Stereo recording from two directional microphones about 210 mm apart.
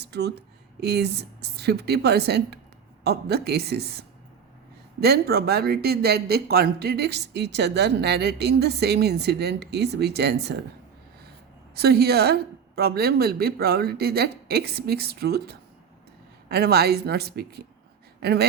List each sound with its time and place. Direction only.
0.0 s speech: 50° right (ahead or behind)
11.7 s a woman's voice: 50° right (ahead or behind)